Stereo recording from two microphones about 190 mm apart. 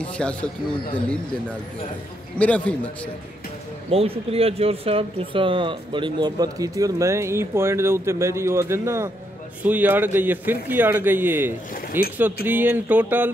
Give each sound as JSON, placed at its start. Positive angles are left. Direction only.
{"t": 0.0, "sound": "a man's voice", "side_deg": 5}
{"t": 2.3, "sound": "a man's voice", "side_deg": 5}
{"t": 3.9, "sound": "speech", "side_deg": -30}